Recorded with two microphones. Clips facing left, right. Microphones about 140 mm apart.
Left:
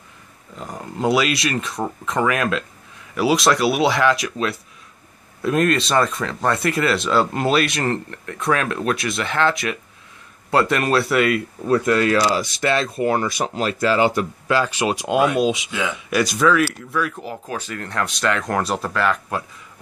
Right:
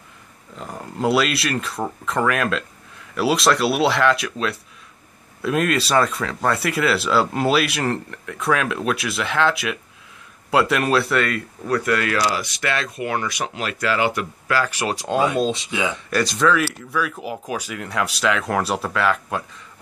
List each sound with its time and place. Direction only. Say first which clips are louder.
0.6 s speech: even; 5° left (ahead or behind)
11.6 s speech: left 4 dB; 20° left (ahead or behind)
14.6 s speech: left 2 dB; 20° left (ahead or behind); by 19.4 s centre (ahead or behind)